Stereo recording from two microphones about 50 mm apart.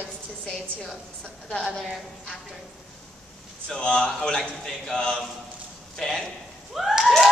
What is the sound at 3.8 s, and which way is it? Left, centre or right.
A man's voice, centre.